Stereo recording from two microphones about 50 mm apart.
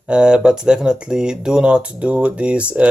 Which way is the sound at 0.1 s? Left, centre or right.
Centre.